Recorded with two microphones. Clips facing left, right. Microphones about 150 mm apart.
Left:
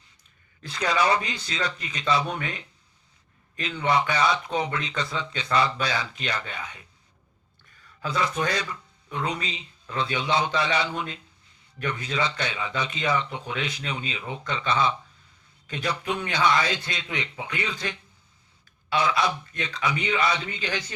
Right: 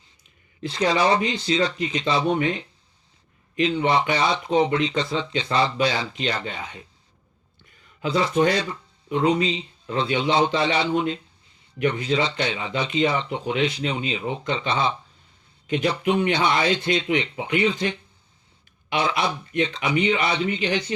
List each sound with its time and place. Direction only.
0.6 s speech: 25° right (ahead or behind)
7.9 s speech: 25° right (ahead or behind)